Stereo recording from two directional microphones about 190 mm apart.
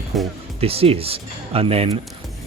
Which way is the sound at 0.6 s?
30° right (ahead or behind).